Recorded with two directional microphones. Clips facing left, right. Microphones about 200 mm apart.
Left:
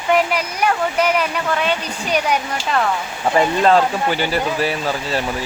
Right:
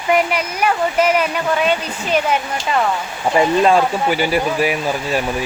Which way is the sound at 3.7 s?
10° right (ahead or behind).